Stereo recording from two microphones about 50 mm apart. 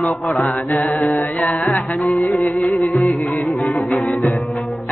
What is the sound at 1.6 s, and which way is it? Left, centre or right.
Music, centre.